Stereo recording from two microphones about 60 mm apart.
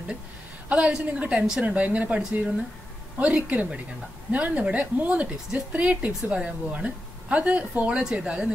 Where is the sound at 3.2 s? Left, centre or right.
Centre.